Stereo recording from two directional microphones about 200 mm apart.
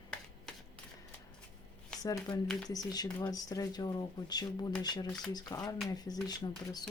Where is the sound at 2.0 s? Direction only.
15° left (ahead or behind).